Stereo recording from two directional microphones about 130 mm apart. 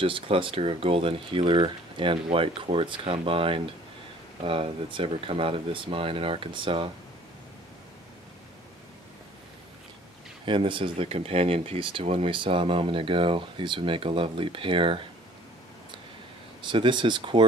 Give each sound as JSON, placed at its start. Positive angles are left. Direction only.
{"t": 0.0, "sound": "speech", "side_deg": -45}
{"t": 10.4, "sound": "speech", "side_deg": -40}
{"t": 16.6, "sound": "speech", "side_deg": -40}